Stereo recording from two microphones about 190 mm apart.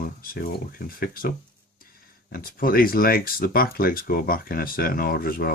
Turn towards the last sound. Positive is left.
turn(degrees=50)  # may be behind; listen again after turning